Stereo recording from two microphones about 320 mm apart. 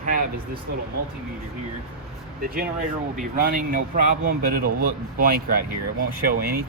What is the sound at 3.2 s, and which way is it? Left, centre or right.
Speech, right.